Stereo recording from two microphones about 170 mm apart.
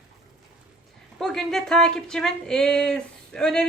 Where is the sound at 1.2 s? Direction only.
Centre (ahead or behind).